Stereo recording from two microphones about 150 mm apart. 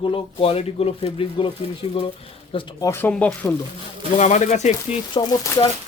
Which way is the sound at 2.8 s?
15° left (ahead or behind).